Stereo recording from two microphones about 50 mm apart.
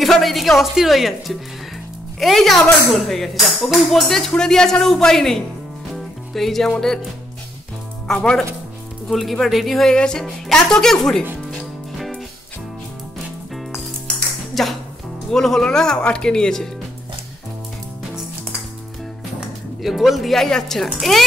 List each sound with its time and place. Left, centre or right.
0.0 s speech: centre
5.9 s music: centre
8.1 s speech: centre
9.1 s speech: centre
9.9 s speech: centre
14.5 s music: centre
15.3 s speech: centre
19.8 s speech: centre